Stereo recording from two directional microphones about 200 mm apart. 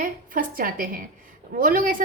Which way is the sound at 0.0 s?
45° right (ahead or behind).